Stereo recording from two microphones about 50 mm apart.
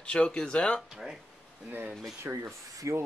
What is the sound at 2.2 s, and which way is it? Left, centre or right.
Speech, right.